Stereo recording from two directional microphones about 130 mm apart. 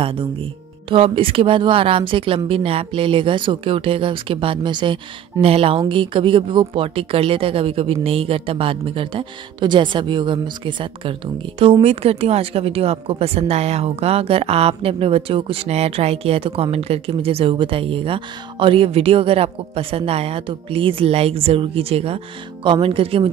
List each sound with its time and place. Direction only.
0.8 s speech: 40° right (ahead or behind)
11.8 s speech: 50° right (ahead or behind)